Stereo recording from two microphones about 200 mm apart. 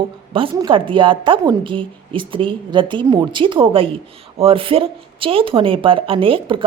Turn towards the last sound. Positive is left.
turn(degrees=-25)  # may be behind; listen again after turning